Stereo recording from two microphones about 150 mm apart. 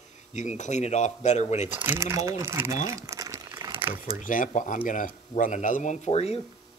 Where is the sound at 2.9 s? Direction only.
20° right (ahead or behind).